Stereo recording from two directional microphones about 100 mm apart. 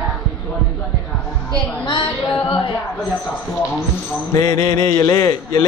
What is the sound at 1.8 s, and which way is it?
Music, 50° left (ahead or behind).